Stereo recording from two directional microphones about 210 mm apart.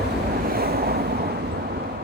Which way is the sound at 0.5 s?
45° right (ahead or behind).